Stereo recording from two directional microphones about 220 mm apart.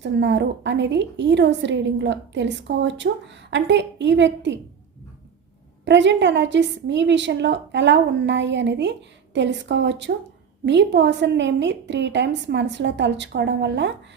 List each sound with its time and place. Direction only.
0.0 s a woman's voice: 55° right (ahead or behind)
5.8 s a woman's voice: 55° right (ahead or behind)